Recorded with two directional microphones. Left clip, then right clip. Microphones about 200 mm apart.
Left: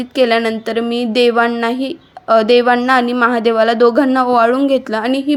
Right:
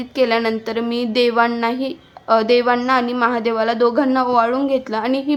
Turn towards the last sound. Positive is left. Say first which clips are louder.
# left 3 dB
turn(degrees=20)  # may be behind; listen again after turning